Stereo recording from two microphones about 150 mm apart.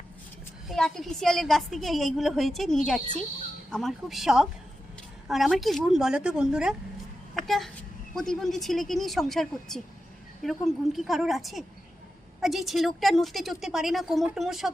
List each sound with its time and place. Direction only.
0.7 s a woman's voice: centre (ahead or behind)